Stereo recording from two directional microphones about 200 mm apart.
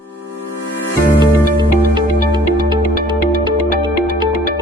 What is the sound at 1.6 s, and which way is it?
Music, 25° right (ahead or behind).